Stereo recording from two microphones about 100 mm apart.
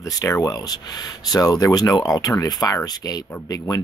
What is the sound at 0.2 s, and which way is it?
Speech, 35° left (ahead or behind).